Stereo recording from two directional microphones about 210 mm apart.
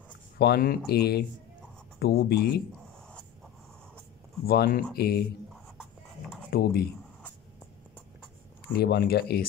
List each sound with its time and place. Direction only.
0.4 s speech: 45° left (ahead or behind)
4.5 s speech: 45° left (ahead or behind)
6.5 s speech: 45° left (ahead or behind)
8.7 s speech: 45° left (ahead or behind)